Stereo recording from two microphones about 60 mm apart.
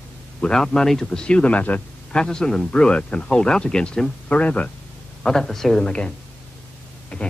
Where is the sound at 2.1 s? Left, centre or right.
Centre.